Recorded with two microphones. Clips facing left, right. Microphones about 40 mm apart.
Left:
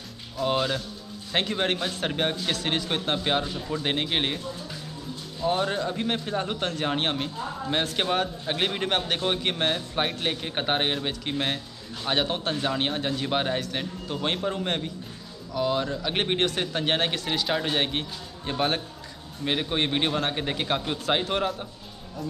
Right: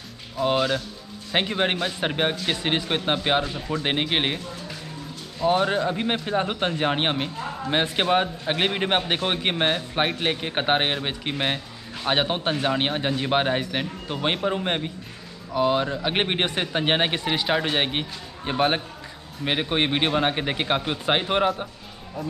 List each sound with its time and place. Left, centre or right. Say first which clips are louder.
0.4 s a man's voice: right 3 dB; centre
5.4 s a man's voice: right 4 dB; right
22.2 s a man's voice: right 3 dB; centre